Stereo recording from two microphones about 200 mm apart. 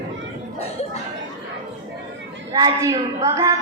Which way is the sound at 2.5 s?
15° right (ahead or behind).